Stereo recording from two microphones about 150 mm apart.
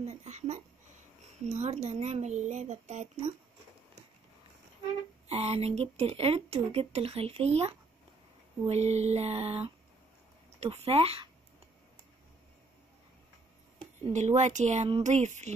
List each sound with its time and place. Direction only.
0.0 s speech: 50° right (ahead or behind)
5.3 s speech: 45° right (ahead or behind)
14.1 s speech: 50° right (ahead or behind)